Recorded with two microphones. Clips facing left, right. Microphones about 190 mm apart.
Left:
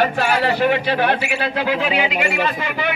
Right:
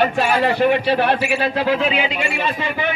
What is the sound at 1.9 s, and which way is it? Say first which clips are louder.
Speech: left 2 dB; 15° left (ahead or behind).